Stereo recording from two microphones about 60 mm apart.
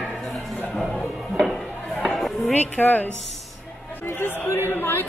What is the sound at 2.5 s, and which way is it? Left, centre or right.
Speech, left.